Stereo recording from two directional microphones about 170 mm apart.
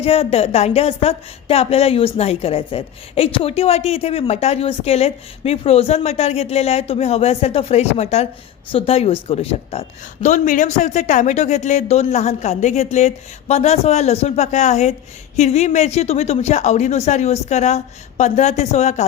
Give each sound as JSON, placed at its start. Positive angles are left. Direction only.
{"t": 0.0, "sound": "speech", "side_deg": 35}
{"t": 10.2, "sound": "a man's voice", "side_deg": 45}